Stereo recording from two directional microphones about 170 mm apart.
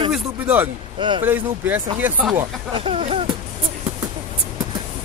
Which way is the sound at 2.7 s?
35° right (ahead or behind).